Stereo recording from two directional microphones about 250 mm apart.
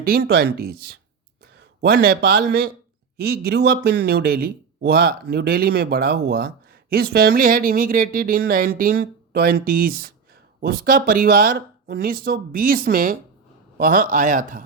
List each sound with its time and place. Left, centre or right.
0.0 s speech: right
1.8 s speech: right